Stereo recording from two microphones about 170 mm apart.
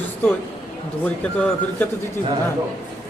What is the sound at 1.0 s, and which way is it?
Speech, 10° left (ahead or behind).